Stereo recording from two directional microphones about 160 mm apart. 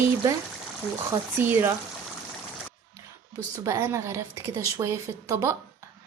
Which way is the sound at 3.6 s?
20° right (ahead or behind).